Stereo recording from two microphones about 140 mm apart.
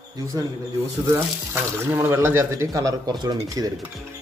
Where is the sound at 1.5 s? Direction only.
15° right (ahead or behind).